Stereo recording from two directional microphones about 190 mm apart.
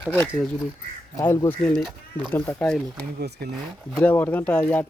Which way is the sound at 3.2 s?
60° right (ahead or behind).